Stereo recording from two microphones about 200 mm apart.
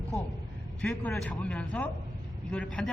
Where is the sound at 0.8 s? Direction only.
5° left (ahead or behind).